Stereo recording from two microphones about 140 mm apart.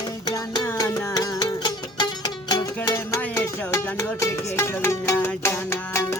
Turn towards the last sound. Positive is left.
turn(degrees=20)  # may be behind; listen again after turning